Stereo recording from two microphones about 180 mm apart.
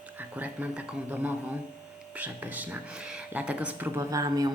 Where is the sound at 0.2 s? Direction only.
10° right (ahead or behind).